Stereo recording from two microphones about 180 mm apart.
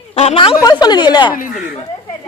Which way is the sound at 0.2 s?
30° left (ahead or behind).